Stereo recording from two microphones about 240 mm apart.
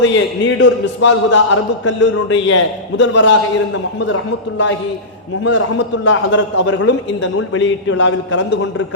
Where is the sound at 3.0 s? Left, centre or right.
Left.